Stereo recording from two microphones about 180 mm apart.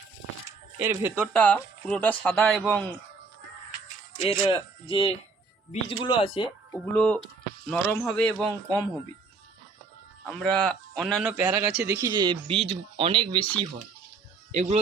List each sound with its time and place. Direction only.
0.8 s speech: 10° right (ahead or behind)
1.1 s speech: centre (ahead or behind)
4.2 s speech: 30° left (ahead or behind)
6.9 s speech: 5° left (ahead or behind)
10.2 s a man's voice: 5° left (ahead or behind); by 13.4 s 30° right (ahead or behind)
14.5 s speech: 40° right (ahead or behind)